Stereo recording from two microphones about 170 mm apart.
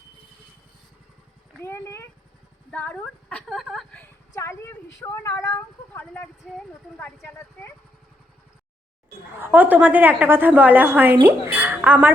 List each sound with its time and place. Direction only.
1.6 s a sound: 15° left (ahead or behind)
2.7 s a woman's voice: 10° left (ahead or behind)
4.4 s a woman's voice: 15° left (ahead or behind)
9.4 s a woman's voice: 10° right (ahead or behind)